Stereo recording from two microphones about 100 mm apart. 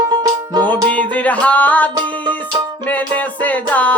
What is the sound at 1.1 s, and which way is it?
Music, 15° left (ahead or behind).